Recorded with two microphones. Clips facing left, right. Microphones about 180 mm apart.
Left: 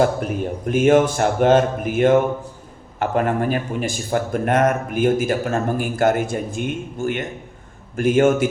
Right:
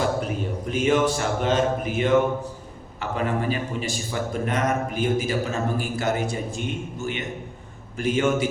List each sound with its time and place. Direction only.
0.0 s speech: 50° left (ahead or behind)